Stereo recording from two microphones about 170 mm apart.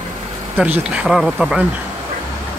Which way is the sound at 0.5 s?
5° right (ahead or behind).